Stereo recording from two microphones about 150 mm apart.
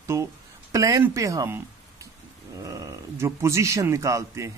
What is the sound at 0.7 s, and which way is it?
A man's voice, 20° right (ahead or behind).